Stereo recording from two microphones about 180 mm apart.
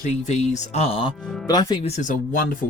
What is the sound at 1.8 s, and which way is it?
Speech, 45° left (ahead or behind).